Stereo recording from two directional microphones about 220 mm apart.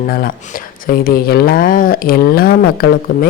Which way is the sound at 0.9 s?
45° left (ahead or behind).